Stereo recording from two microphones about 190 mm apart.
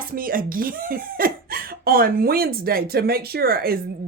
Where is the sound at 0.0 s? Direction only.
50° right (ahead or behind).